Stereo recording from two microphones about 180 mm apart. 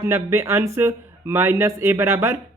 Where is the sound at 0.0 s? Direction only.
15° right (ahead or behind).